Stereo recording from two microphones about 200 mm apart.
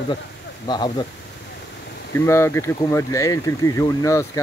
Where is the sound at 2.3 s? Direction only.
15° left (ahead or behind).